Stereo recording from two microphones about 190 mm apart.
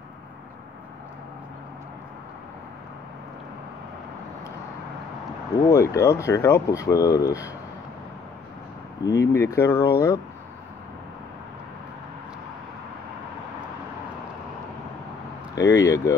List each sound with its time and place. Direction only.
5.7 s speech: 15° left (ahead or behind)
9.0 s speech: 15° left (ahead or behind)
15.5 s speech: 15° left (ahead or behind)